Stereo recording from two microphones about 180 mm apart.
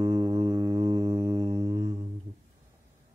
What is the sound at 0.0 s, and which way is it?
Music, 20° right (ahead or behind).